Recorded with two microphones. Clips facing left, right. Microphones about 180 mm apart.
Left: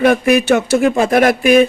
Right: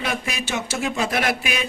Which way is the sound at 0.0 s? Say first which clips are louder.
Left 16 dB; 55° left (ahead or behind).